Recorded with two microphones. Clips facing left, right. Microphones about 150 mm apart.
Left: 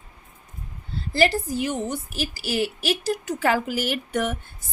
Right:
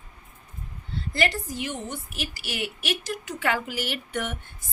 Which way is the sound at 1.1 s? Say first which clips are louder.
Left 6 dB; 35° left (ahead or behind).